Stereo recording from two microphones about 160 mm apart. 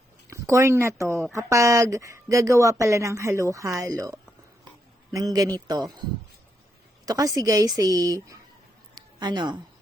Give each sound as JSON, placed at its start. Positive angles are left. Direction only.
{"t": 0.3, "sound": "speech", "side_deg": -20}
{"t": 7.0, "sound": "speech", "side_deg": -20}
{"t": 9.0, "sound": "a sound", "side_deg": -25}